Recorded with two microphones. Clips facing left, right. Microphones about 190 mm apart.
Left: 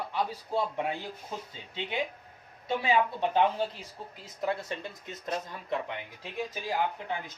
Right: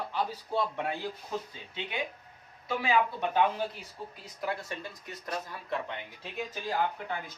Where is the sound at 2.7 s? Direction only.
25° left (ahead or behind).